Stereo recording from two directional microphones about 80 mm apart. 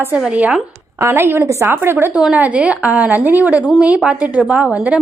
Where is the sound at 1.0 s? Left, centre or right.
Right.